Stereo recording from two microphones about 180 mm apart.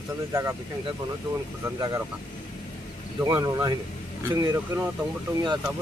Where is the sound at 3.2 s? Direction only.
15° right (ahead or behind).